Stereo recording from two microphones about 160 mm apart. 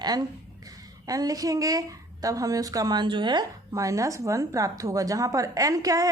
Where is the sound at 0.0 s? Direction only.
25° right (ahead or behind).